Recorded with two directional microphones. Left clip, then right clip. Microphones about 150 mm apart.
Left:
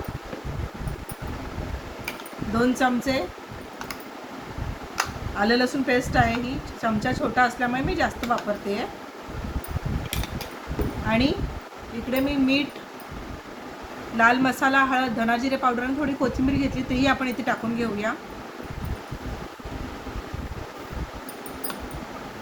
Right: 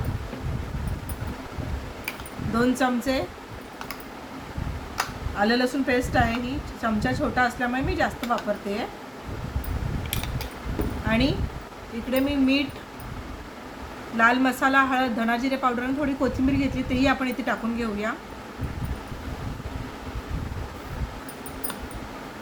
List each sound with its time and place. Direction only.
2.6 s a woman's voice: 25° right (ahead or behind)
5.4 s speech: 15° right (ahead or behind)
12.1 s a woman's voice: 20° right (ahead or behind)
14.2 s a woman's voice: 20° right (ahead or behind)